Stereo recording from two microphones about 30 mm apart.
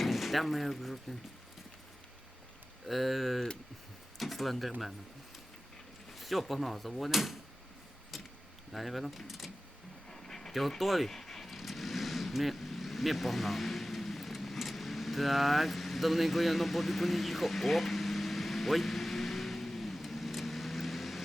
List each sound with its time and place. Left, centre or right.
0.0 s speech: centre
2.8 s speech: centre
6.1 s speech: centre
8.1 s keys jangling: centre
8.7 s speech: centre
10.1 s vehicle: centre
10.5 s speech: centre
11.2 s vehicle: centre
11.5 s vehicle: centre